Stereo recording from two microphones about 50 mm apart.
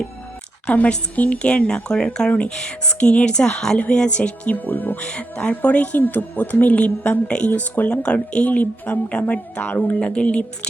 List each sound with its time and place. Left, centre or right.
0.7 s a woman's voice: left
4.2 s speech: left
4.9 s a woman's voice: left
7.6 s speech: left
8.0 s a woman's voice: left